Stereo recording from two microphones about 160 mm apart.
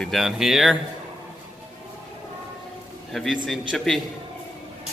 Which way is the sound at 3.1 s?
Centre (ahead or behind).